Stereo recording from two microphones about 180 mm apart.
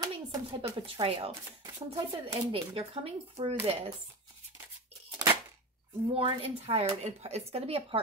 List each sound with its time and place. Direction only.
0.0 s a sound: 30° right (ahead or behind)
0.7 s speech: 30° right (ahead or behind)
6.1 s speech: 30° right (ahead or behind)